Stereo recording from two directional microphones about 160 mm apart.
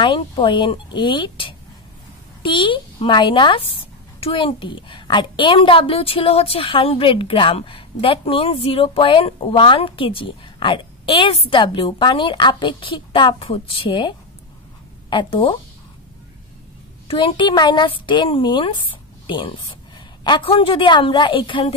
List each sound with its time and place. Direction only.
0.0 s a woman's voice: 30° left (ahead or behind)
17.1 s a woman's voice: 30° left (ahead or behind)